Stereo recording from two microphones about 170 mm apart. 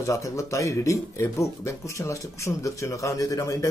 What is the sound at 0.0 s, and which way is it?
Speech, 15° left (ahead or behind).